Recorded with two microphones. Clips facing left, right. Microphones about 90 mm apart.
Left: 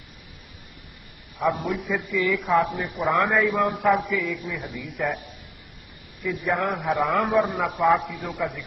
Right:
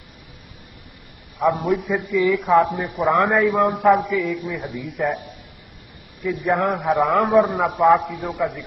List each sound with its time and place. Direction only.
1.4 s a man's voice: centre (ahead or behind)
4.6 s speech: 15° right (ahead or behind)
4.8 s a man's voice: centre (ahead or behind)
6.2 s a man's voice: centre (ahead or behind)